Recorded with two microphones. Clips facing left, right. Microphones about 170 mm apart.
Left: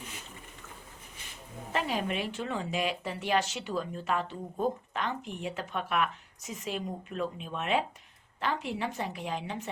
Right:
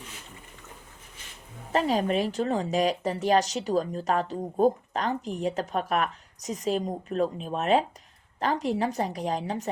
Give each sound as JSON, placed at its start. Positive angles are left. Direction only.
{"t": 1.7, "sound": "speech", "side_deg": -40}